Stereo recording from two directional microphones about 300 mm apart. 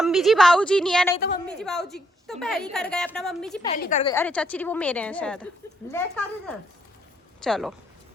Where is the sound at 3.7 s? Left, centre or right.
Left.